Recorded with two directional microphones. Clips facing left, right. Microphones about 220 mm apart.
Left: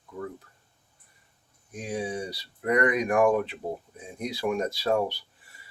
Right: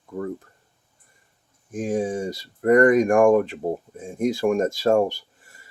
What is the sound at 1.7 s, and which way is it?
Speech, 45° right (ahead or behind).